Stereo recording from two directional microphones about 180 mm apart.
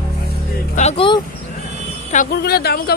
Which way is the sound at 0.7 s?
35° left (ahead or behind).